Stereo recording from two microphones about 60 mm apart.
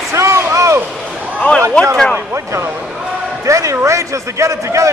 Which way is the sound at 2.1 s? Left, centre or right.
Right.